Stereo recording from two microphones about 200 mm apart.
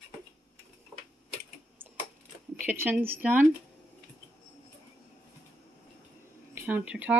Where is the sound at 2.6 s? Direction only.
10° right (ahead or behind).